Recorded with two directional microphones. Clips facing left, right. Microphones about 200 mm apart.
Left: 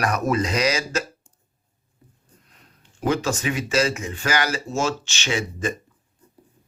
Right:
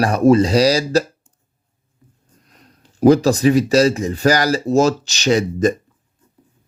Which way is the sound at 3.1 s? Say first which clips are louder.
Right 11 dB; 35° right (ahead or behind).